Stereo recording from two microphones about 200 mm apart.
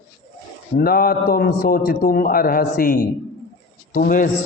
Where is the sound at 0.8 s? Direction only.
50° left (ahead or behind).